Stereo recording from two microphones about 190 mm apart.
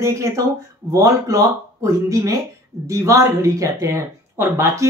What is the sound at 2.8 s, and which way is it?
Speech, 15° right (ahead or behind).